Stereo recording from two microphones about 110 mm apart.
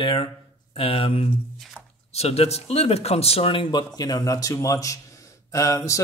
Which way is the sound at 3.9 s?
35° left (ahead or behind).